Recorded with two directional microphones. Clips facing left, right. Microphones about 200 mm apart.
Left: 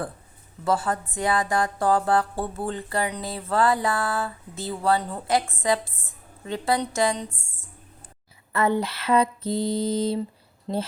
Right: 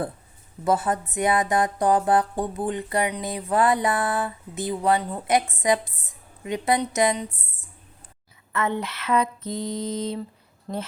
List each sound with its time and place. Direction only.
0.6 s speech: 20° right (ahead or behind)
8.5 s a sound: 35° left (ahead or behind)
10.7 s speech: 20° left (ahead or behind)